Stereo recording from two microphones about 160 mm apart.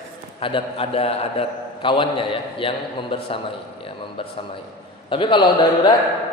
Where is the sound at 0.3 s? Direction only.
35° left (ahead or behind).